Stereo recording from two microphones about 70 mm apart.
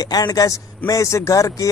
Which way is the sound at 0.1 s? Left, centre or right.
Left.